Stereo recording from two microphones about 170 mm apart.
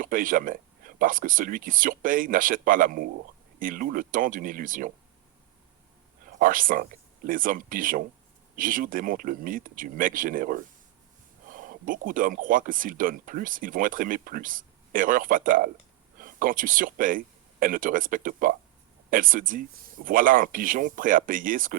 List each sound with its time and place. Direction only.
0.0 s speech: 55° right (ahead or behind)
6.4 s speech: 55° right (ahead or behind)